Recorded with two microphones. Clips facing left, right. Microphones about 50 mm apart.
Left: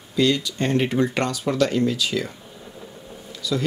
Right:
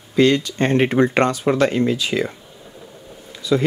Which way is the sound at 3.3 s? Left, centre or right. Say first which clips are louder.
Right 6 dB; right.